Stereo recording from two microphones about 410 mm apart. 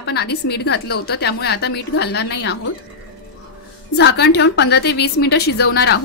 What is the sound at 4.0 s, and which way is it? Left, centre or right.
A woman's voice, left.